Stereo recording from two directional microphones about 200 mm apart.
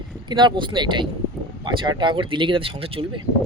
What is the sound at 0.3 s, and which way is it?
Speech, 20° right (ahead or behind).